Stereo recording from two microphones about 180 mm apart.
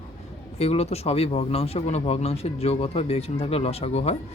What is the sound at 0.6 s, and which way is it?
Speech, 35° left (ahead or behind).